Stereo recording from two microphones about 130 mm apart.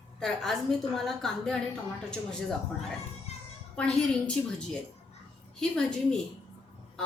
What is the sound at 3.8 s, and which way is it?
A woman's voice, 5° left (ahead or behind).